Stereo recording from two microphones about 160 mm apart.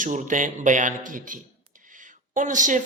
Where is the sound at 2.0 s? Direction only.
55° right (ahead or behind).